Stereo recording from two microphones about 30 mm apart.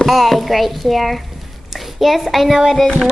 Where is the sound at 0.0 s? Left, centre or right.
Centre.